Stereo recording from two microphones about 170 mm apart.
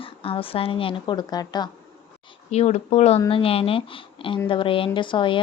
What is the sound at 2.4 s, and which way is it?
Speech, 40° left (ahead or behind).